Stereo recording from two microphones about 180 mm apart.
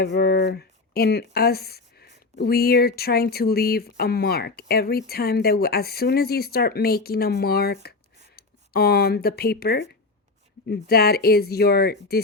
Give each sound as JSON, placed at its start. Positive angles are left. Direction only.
{"t": 0.0, "sound": "speech", "side_deg": 65}